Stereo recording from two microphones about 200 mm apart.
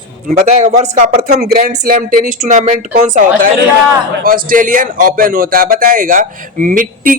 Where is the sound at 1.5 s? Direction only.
45° right (ahead or behind).